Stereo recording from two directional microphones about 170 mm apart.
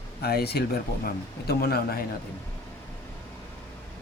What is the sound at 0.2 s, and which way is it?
Speech, 65° left (ahead or behind).